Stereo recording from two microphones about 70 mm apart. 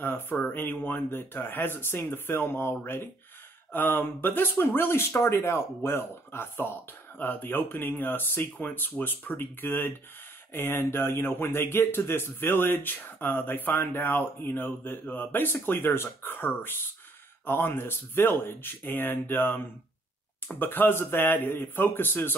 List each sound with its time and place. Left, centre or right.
0.0 s speech: left